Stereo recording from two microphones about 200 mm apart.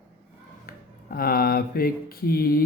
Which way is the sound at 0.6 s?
50° left (ahead or behind).